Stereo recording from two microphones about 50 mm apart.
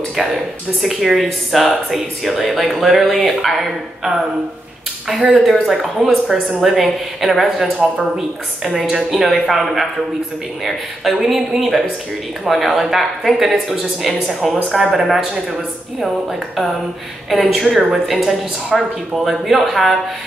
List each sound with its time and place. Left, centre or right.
0.8 s speech: centre
5.3 s speech: centre
7.7 s speech: right
8.2 s speech: centre
11.1 s a man's voice: centre